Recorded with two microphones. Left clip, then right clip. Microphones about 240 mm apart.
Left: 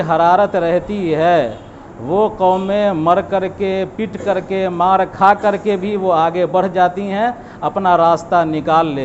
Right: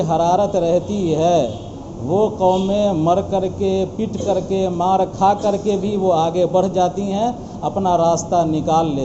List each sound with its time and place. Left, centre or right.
0.0 s speech: left
2.1 s mantra: left
2.6 s speech: left